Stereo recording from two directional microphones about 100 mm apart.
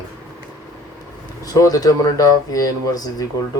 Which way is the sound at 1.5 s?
40° left (ahead or behind).